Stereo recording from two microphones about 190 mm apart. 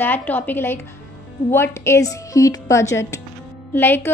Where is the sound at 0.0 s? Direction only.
10° left (ahead or behind).